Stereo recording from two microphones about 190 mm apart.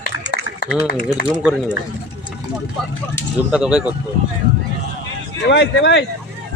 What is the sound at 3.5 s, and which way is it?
Speech, 5° right (ahead or behind).